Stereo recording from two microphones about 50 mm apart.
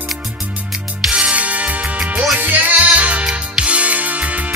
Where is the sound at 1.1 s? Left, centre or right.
Right.